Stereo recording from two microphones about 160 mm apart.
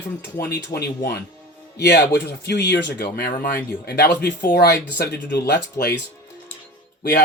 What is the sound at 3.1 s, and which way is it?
Speech, 75° left (ahead or behind).